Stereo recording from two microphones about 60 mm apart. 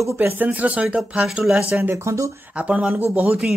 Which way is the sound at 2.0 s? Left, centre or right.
Right.